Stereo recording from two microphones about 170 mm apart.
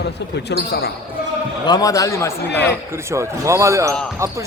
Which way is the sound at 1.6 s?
20° left (ahead or behind).